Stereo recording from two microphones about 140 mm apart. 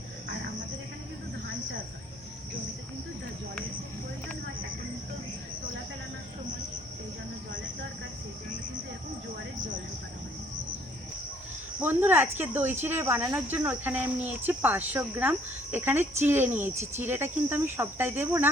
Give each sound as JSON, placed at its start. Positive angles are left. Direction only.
{"t": 11.8, "sound": "speech", "side_deg": -15}